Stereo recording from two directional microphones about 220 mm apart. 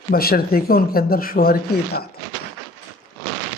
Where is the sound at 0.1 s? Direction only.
45° left (ahead or behind).